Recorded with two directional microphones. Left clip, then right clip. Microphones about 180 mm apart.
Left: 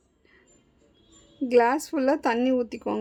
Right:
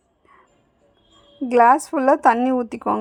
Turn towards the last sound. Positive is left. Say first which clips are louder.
# right 5 dB
turn(degrees=-20)  # may be behind; listen again after turning